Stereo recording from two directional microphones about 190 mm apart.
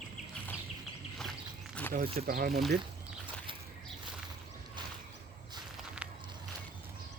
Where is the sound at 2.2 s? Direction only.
50° right (ahead or behind).